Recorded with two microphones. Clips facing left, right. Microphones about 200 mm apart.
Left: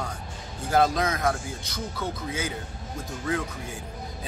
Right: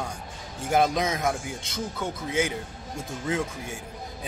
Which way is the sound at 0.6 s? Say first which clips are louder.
Even; 20° right (ahead or behind).